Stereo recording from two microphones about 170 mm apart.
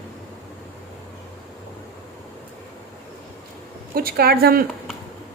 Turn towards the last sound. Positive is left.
turn(degrees=-65)  # may be behind; listen again after turning